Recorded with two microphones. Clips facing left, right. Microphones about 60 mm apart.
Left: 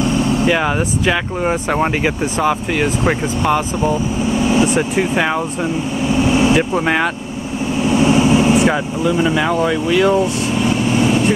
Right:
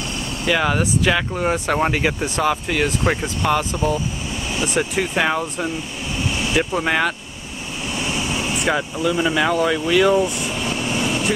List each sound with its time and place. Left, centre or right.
0.5 s speech: centre
6.2 s vehicle: left
7.9 s vehicle: left
8.6 s speech: centre